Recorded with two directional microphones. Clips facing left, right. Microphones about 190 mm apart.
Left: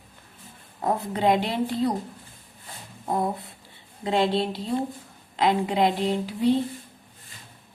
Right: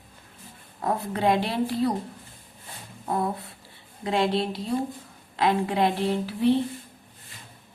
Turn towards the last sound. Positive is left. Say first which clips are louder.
# even
turn(degrees=15)  # may be behind; listen again after turning